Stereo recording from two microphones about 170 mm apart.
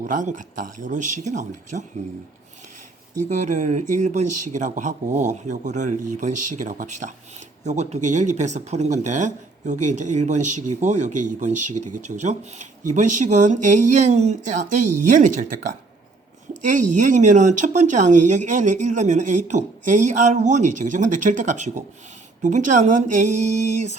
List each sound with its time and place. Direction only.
0.0 s speech: 45° right (ahead or behind)
3.2 s speech: 45° right (ahead or behind)
16.7 s speech: 50° right (ahead or behind)